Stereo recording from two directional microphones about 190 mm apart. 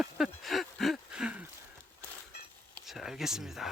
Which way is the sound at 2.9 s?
Centre (ahead or behind).